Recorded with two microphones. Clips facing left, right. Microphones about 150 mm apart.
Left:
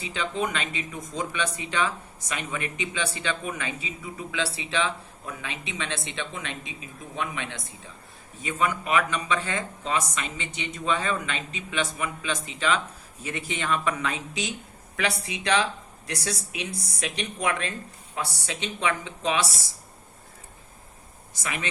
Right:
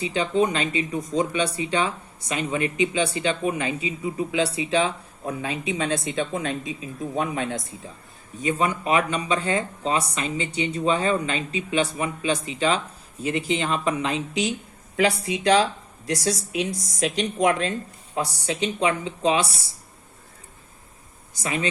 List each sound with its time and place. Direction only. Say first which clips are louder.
0.1 s speech: right 6 dB; 35° right (ahead or behind)
16.7 s speech: right 2 dB; 30° left (ahead or behind)
17.0 s speech: right 8 dB; 35° right (ahead or behind)
21.4 s speech: right 6 dB; 30° right (ahead or behind)